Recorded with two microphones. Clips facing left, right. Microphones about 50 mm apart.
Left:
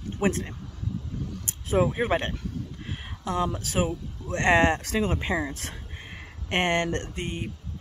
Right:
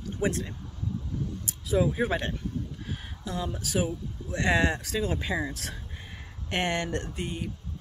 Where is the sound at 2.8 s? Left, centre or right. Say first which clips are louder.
Left 4 dB; left.